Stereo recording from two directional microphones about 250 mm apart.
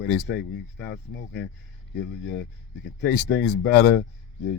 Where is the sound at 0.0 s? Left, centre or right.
Left.